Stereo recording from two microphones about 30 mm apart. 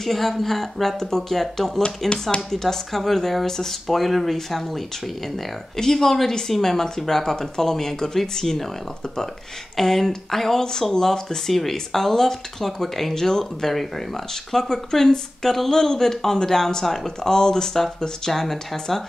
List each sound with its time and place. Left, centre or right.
0.0 s speech: centre
5.8 s speech: centre
9.8 s speech: centre
13.1 s speech: centre
18.3 s speech: centre